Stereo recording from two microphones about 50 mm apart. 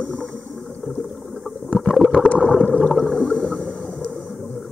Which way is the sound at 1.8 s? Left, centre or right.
Centre.